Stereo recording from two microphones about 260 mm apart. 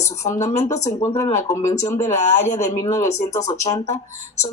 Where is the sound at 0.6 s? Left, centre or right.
Left.